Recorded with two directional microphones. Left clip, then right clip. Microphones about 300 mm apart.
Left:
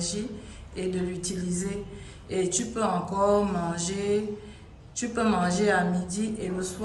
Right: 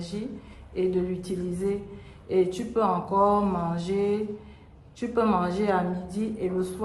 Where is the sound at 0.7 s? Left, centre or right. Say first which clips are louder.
Right 5 dB; centre.